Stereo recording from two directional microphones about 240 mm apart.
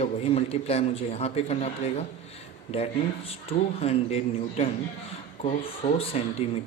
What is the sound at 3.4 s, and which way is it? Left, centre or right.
Speech, left.